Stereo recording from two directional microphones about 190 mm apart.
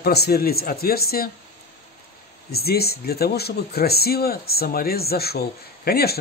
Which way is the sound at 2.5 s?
55° left (ahead or behind).